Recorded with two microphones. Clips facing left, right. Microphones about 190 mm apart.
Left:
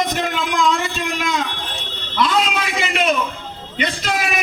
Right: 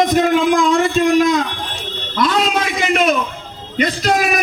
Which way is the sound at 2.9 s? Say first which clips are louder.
Right 3 dB; 45° right (ahead or behind).